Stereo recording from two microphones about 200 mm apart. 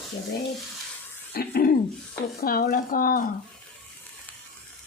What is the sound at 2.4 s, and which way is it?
Speech, 45° left (ahead or behind).